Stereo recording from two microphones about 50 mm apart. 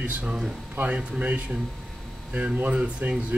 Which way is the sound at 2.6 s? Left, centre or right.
Right.